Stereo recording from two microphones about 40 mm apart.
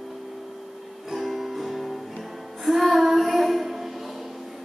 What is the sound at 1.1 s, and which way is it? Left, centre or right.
Music, centre.